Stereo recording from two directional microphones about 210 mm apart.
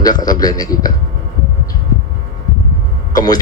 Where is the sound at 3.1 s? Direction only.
20° left (ahead or behind).